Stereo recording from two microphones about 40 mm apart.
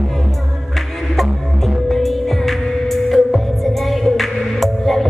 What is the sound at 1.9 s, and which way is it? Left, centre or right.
Music, centre.